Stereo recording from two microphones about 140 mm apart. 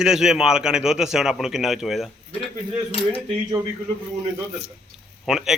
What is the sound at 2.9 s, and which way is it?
Speech, 40° left (ahead or behind).